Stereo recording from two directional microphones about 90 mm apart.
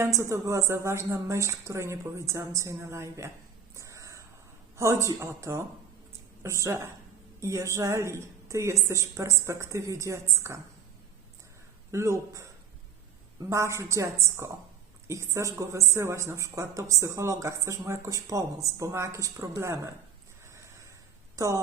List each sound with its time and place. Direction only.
0.0 s speech: 30° right (ahead or behind)
3.8 s a sound: 35° right (ahead or behind)
4.8 s speech: 35° right (ahead or behind)
11.9 s speech: 35° right (ahead or behind)
13.5 s speech: 30° right (ahead or behind)
21.3 s speech: 35° right (ahead or behind)